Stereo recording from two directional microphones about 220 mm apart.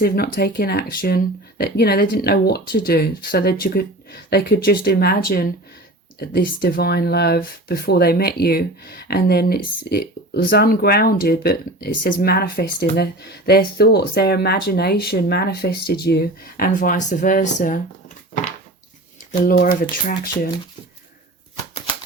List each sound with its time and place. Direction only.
0.0 s speech: 45° left (ahead or behind)
19.3 s speech: 40° left (ahead or behind)